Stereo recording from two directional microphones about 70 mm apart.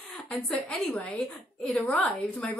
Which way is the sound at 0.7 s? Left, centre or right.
Centre.